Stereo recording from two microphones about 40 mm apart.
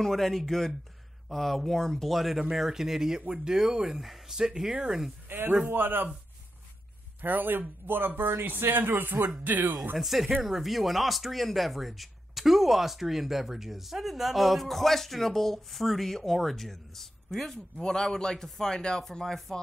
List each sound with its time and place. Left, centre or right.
0.0 s speech: centre; by 3.5 s right
3.5 s speech: centre
5.3 s speech: right
7.2 s speech: right
9.9 s speech: centre